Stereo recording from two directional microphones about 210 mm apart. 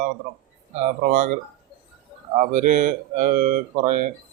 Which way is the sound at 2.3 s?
40° right (ahead or behind).